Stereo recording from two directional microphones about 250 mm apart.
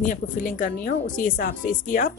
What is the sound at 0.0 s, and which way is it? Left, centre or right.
A woman's voice, left.